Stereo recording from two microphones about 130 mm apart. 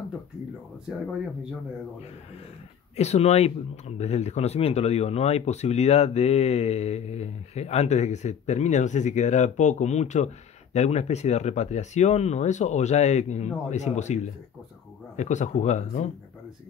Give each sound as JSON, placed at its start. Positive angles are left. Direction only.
{"t": 3.0, "sound": "speech", "side_deg": 55}